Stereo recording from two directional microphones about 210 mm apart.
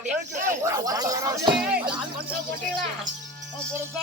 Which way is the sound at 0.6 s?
15° right (ahead or behind).